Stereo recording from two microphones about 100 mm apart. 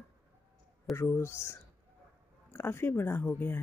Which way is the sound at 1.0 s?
25° left (ahead or behind).